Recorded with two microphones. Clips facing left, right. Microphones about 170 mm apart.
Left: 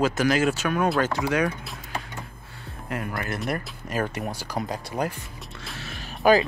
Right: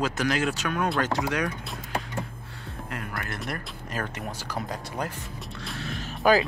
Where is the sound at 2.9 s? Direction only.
5° left (ahead or behind).